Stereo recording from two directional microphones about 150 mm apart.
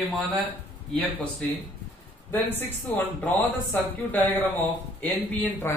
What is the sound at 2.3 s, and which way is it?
Speech, 15° left (ahead or behind).